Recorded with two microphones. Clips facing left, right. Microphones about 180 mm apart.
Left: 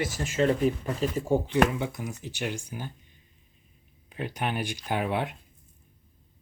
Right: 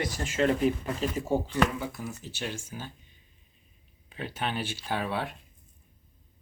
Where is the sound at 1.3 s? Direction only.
15° left (ahead or behind).